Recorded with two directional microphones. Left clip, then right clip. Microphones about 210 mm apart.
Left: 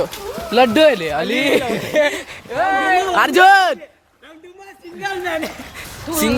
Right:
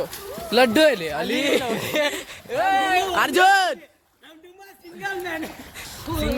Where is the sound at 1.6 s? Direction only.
50° right (ahead or behind).